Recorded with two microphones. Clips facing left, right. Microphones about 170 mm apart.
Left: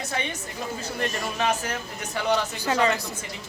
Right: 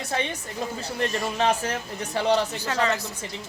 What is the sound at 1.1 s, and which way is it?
Speech, 30° right (ahead or behind).